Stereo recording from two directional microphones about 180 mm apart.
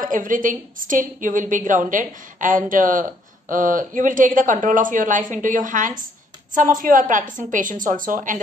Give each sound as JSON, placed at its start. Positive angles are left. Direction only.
{"t": 0.0, "sound": "a woman's voice", "side_deg": -50}